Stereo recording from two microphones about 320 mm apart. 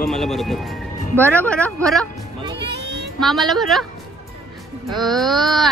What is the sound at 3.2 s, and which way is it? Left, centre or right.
Speech, centre.